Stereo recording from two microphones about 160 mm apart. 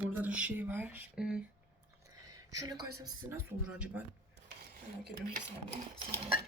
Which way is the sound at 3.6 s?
10° right (ahead or behind).